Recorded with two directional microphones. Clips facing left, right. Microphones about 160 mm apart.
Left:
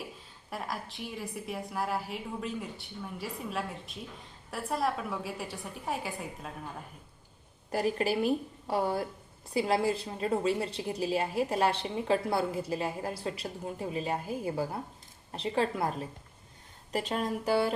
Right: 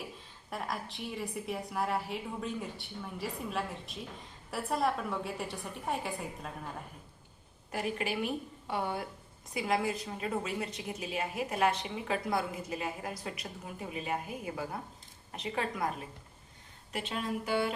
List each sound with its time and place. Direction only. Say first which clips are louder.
0.5 s a woman's voice: even; centre (ahead or behind)
7.7 s a woman's voice: left 6 dB; 35° left (ahead or behind)